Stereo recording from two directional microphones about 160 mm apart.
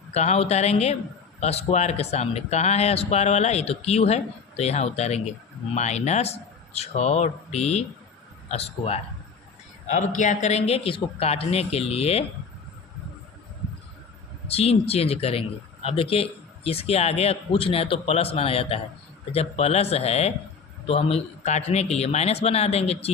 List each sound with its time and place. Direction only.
0.1 s speech: 40° left (ahead or behind)
9.8 s speech: 50° left (ahead or behind)
14.4 s speech: 40° left (ahead or behind)